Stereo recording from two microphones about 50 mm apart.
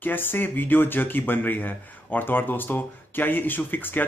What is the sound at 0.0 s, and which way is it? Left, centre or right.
Speech, left.